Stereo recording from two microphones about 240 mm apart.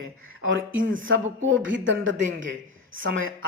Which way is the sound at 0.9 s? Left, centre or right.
Right.